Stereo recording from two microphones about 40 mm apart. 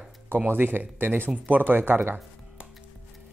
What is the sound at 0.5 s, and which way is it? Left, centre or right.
Speech, right.